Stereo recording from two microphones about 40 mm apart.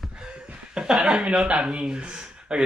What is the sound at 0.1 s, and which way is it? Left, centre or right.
Chuckle, right.